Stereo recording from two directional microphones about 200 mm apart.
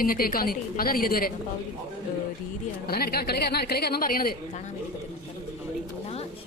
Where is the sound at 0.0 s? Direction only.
45° left (ahead or behind).